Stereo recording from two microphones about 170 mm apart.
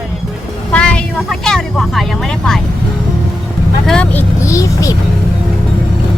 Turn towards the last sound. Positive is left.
turn(degrees=20)  # may be behind; listen again after turning